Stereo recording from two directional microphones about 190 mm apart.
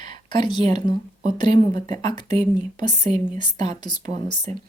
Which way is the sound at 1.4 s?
40° right (ahead or behind).